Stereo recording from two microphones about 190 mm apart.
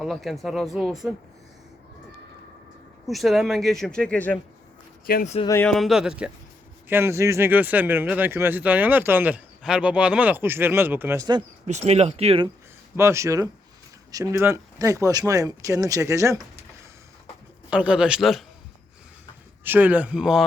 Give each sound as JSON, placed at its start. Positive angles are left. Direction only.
{"t": 0.0, "sound": "speech", "side_deg": 0}
{"t": 3.1, "sound": "speech", "side_deg": 0}
{"t": 5.0, "sound": "speech", "side_deg": 50}
{"t": 5.5, "sound": "speech", "side_deg": 10}
{"t": 5.7, "sound": "speech", "side_deg": 0}
{"t": 11.7, "sound": "speech", "side_deg": -35}
{"t": 13.0, "sound": "speech", "side_deg": -15}
{"t": 17.7, "sound": "speech", "side_deg": -5}
{"t": 19.6, "sound": "speech", "side_deg": -10}